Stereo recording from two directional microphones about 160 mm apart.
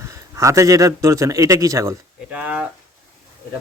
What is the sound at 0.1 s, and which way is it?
A man's voice, 20° right (ahead or behind).